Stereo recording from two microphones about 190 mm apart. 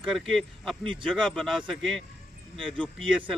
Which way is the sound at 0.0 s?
Centre (ahead or behind).